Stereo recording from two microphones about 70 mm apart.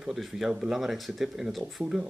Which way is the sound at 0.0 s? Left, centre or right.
Centre.